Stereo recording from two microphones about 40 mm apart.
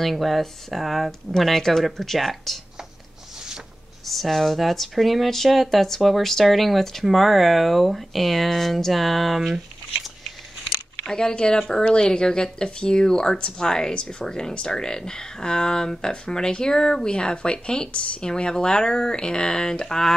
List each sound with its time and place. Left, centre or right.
0.0 s speech: centre
4.0 s speech: centre
11.1 s speech: centre